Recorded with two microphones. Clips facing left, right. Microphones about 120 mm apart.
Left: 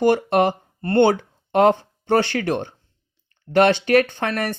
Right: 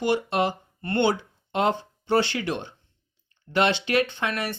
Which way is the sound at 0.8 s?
45° left (ahead or behind).